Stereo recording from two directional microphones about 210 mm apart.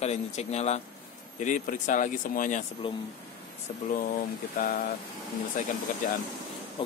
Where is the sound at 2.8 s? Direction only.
25° left (ahead or behind).